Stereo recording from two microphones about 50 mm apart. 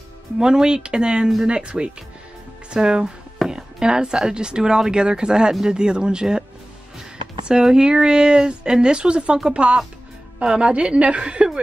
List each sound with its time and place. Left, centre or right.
0.4 s a woman's voice: centre